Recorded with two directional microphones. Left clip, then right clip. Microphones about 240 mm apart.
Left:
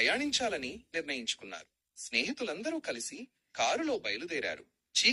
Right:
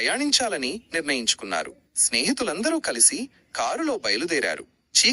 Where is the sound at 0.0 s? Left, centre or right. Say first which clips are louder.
Right 7 dB; right.